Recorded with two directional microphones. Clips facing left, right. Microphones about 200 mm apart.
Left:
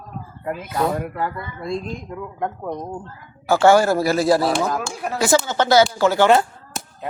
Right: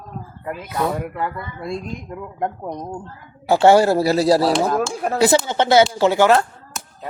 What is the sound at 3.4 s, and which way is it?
A man's voice, 25° right (ahead or behind).